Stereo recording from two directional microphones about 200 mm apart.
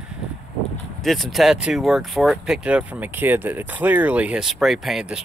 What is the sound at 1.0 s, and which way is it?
Speech, centre (ahead or behind).